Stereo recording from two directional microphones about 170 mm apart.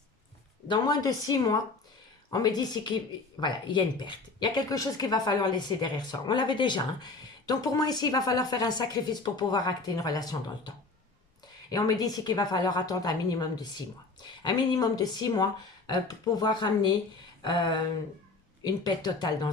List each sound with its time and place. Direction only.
0.7 s speech: 25° left (ahead or behind)
11.7 s speech: 20° left (ahead or behind)